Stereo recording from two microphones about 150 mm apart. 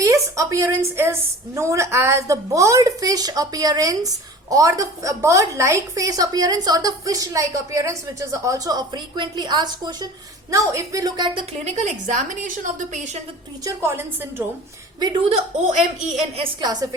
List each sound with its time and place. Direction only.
0.0 s a woman's voice: 20° right (ahead or behind)
11.3 s a woman's voice: 45° right (ahead or behind)
13.7 s speech: 15° right (ahead or behind)
15.2 s a woman's voice: 55° right (ahead or behind)
16.4 s a woman's voice: 30° right (ahead or behind)